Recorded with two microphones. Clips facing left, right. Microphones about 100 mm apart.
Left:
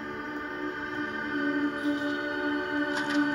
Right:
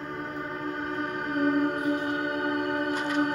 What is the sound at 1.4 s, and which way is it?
Music, 50° right (ahead or behind).